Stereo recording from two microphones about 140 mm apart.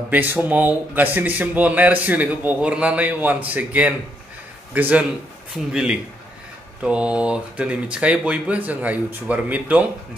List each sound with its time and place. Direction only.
0.1 s a man's voice: 10° right (ahead or behind)